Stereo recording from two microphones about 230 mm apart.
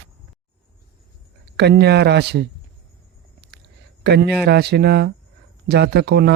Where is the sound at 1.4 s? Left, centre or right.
Right.